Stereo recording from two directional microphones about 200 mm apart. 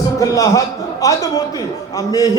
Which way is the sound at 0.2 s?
15° left (ahead or behind).